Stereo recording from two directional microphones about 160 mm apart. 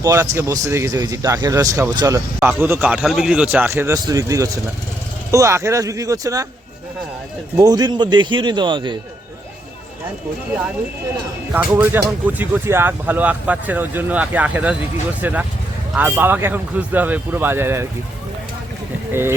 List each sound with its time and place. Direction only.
0.0 s speech: 20° right (ahead or behind)
7.5 s speech: 25° right (ahead or behind)
11.7 s speech: 15° right (ahead or behind)